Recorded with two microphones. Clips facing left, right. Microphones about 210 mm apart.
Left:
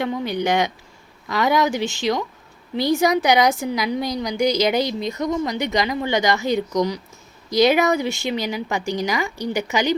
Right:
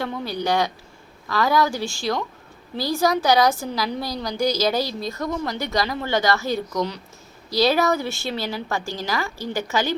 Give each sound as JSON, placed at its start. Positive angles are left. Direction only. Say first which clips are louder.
{"t": 0.0, "sound": "a woman's voice", "louder": "left 4 dB", "side_deg": 15}